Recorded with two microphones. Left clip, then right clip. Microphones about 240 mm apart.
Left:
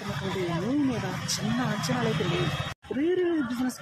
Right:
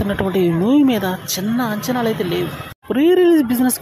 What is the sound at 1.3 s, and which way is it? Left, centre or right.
Speech, right.